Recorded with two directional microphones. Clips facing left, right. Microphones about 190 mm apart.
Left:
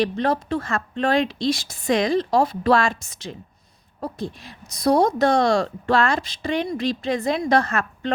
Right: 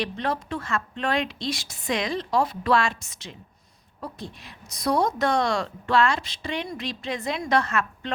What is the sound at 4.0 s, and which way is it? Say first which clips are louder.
A woman's voice: left 7 dB; 35° left (ahead or behind).